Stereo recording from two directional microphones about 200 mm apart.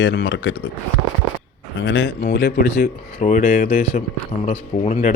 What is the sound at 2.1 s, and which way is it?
Speech, 50° left (ahead or behind).